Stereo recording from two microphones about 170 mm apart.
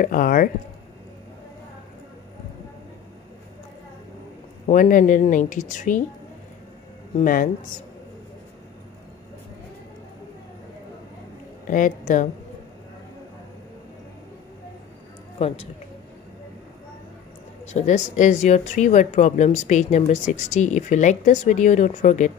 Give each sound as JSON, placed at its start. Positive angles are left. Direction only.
{"t": 0.0, "sound": "speech", "side_deg": 55}
{"t": 4.6, "sound": "speech", "side_deg": 50}
{"t": 7.2, "sound": "speech", "side_deg": 50}
{"t": 11.6, "sound": "a woman's voice", "side_deg": 50}
{"t": 15.3, "sound": "speech", "side_deg": 35}
{"t": 17.7, "sound": "speech", "side_deg": 45}